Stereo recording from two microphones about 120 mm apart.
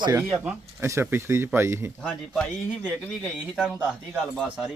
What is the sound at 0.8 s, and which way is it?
Speech, 20° right (ahead or behind).